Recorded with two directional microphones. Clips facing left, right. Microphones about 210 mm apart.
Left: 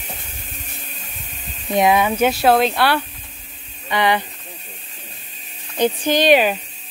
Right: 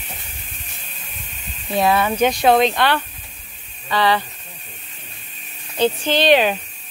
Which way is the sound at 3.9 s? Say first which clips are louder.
Even; 20° left (ahead or behind).